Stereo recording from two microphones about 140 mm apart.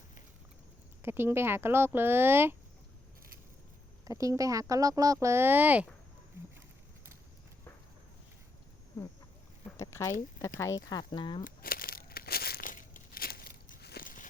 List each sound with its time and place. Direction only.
1.0 s speech: 15° right (ahead or behind)
4.0 s speech: 25° right (ahead or behind)
9.7 s speech: 20° left (ahead or behind)
11.4 s crumpling: 90° left; by 14.3 s 75° left (ahead or behind)